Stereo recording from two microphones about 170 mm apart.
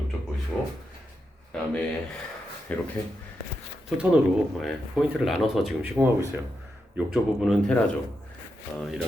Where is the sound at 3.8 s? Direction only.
5° right (ahead or behind).